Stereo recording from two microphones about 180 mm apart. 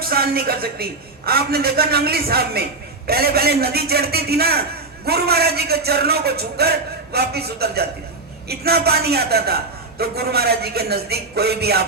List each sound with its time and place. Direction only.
0.0 s a man's voice: 55° right (ahead or behind)